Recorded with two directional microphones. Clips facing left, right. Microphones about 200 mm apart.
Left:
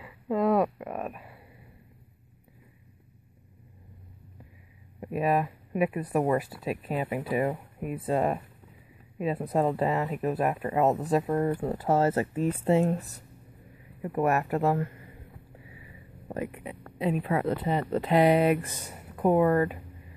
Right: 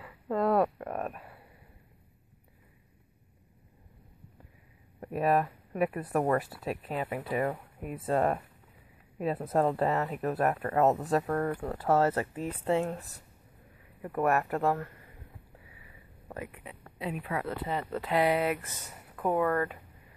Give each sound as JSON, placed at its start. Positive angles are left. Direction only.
{"t": 0.0, "sound": "a sound", "side_deg": 10}
{"t": 5.0, "sound": "speech", "side_deg": 5}
{"t": 14.0, "sound": "speech", "side_deg": 15}
{"t": 16.3, "sound": "speech", "side_deg": 20}